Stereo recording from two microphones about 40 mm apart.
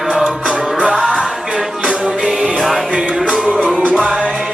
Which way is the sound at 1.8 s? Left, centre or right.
Right.